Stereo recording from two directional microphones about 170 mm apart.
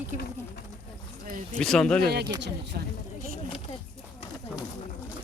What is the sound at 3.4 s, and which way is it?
Speech, 30° left (ahead or behind).